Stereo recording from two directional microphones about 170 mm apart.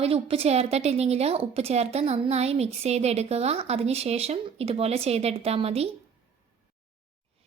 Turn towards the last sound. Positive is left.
turn(degrees=-35)  # may be behind; listen again after turning